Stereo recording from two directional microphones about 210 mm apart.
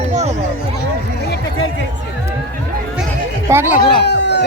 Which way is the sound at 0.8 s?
50° left (ahead or behind).